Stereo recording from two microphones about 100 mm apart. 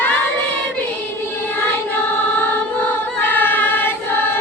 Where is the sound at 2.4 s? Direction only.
20° left (ahead or behind).